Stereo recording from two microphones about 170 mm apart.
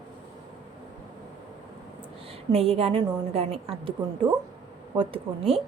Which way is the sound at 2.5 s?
35° right (ahead or behind).